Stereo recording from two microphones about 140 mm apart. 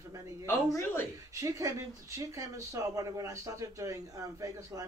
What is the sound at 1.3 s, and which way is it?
Speech, 25° right (ahead or behind).